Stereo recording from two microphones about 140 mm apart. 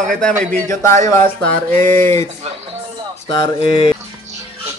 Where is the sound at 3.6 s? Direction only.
40° left (ahead or behind).